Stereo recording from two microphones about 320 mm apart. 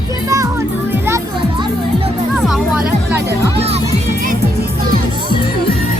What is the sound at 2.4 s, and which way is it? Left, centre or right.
Speech, centre.